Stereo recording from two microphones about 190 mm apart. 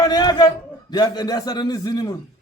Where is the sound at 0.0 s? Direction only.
20° left (ahead or behind).